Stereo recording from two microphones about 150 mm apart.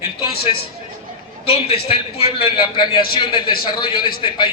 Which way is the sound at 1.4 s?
40° left (ahead or behind).